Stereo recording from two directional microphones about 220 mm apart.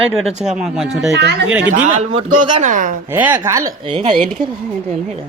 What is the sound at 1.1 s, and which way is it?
Speech, 50° right (ahead or behind).